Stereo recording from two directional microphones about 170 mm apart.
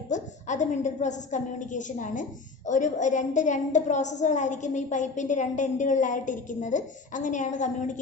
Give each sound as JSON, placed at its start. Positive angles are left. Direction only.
{"t": 0.1, "sound": "a woman's voice", "side_deg": 45}